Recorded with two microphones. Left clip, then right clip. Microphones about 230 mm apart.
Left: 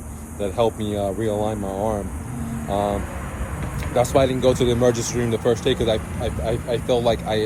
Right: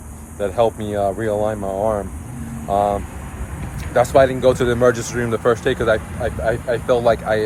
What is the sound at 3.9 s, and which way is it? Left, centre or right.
Speech, centre.